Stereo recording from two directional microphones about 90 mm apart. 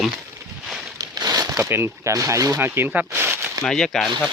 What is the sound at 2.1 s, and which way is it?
Speech, 35° right (ahead or behind).